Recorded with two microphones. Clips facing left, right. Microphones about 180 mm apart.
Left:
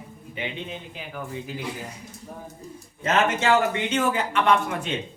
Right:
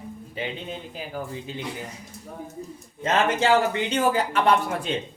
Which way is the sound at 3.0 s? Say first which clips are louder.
Right 1 dB; 35° right (ahead or behind).